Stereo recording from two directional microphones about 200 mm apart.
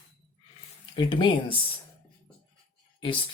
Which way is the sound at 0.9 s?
25° left (ahead or behind).